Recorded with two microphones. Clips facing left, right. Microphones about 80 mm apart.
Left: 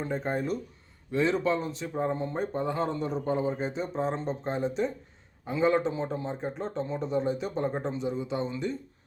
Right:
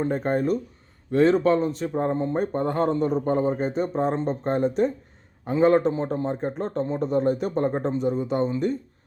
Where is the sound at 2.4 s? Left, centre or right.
Right.